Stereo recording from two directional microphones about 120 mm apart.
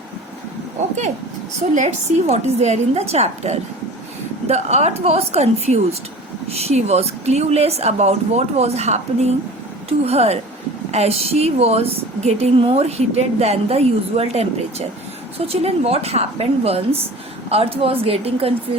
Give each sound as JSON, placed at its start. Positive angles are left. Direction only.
{"t": 1.7, "sound": "a woman's voice", "side_deg": -70}